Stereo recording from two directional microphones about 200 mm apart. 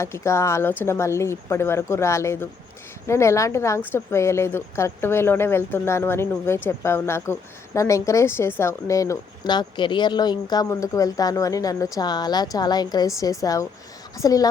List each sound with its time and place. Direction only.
0.0 s speech: 15° left (ahead or behind)